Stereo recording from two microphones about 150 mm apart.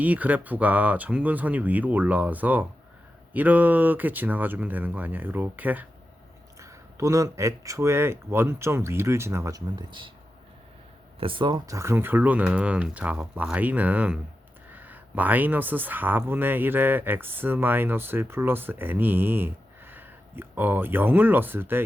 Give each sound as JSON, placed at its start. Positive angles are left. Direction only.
{"t": 0.0, "sound": "speech", "side_deg": -10}
{"t": 11.2, "sound": "speech", "side_deg": -35}